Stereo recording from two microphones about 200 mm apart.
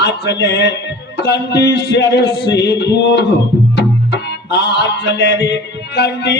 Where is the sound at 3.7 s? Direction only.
60° left (ahead or behind).